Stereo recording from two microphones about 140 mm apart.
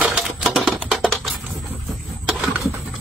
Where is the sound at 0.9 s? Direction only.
Centre (ahead or behind).